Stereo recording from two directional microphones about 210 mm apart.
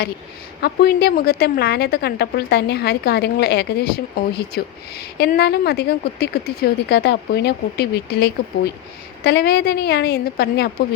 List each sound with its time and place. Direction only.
0.6 s speech: 50° left (ahead or behind)